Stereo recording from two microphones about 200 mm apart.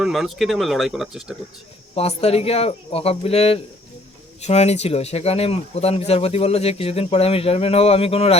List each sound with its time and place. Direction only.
0.0 s speech: centre (ahead or behind)
2.0 s speech: 30° left (ahead or behind)